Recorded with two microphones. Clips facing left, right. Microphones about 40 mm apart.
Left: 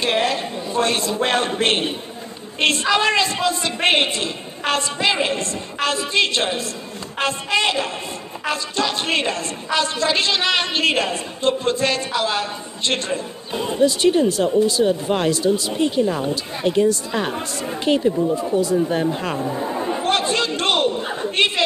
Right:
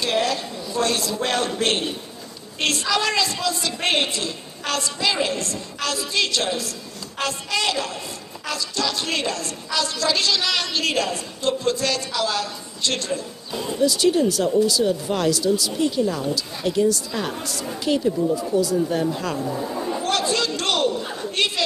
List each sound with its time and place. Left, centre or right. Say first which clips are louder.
0.0 s a woman's voice: left 2 dB; left